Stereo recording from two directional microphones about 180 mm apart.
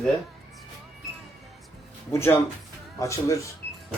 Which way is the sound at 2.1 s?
15° left (ahead or behind).